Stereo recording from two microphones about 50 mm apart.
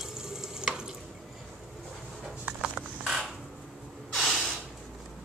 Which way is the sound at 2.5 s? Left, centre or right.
Right.